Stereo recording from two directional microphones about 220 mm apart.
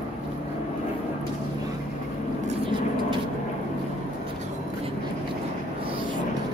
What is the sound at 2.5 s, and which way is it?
Vehicle, 20° right (ahead or behind).